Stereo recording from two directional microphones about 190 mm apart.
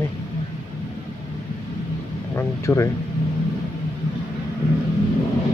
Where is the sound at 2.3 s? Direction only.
15° left (ahead or behind).